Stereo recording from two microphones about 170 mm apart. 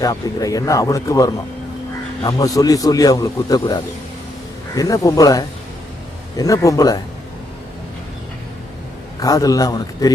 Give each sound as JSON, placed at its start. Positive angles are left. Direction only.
{"t": 0.0, "sound": "a man's voice", "side_deg": 20}
{"t": 9.2, "sound": "a man's voice", "side_deg": 20}